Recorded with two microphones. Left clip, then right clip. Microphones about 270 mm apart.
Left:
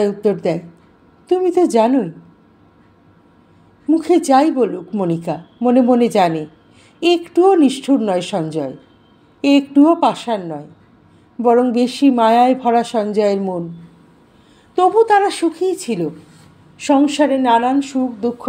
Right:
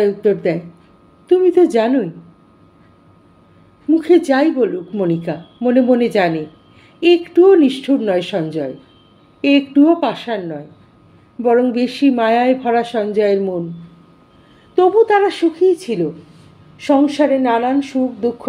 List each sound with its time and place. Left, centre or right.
0.0 s a woman's voice: centre
3.9 s a woman's voice: centre
14.8 s a woman's voice: left